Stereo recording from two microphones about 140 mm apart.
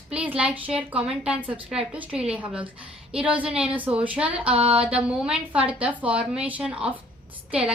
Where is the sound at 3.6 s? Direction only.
10° right (ahead or behind).